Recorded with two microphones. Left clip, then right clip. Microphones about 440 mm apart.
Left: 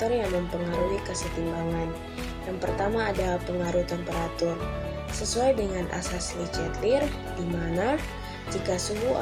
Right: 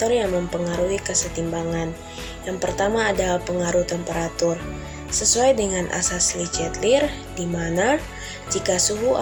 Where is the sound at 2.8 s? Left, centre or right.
Left.